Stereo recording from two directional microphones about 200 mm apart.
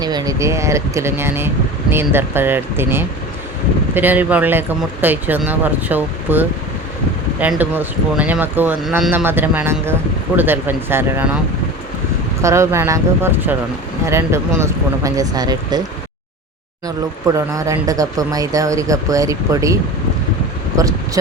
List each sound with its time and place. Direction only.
0.0 s speech: 20° right (ahead or behind)
12.4 s speech: 15° right (ahead or behind)
17.2 s speech: 15° right (ahead or behind)